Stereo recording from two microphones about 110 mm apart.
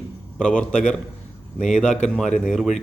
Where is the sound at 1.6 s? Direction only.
90° left.